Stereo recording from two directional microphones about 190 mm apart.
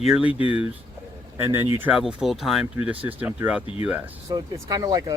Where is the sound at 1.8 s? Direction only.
5° right (ahead or behind).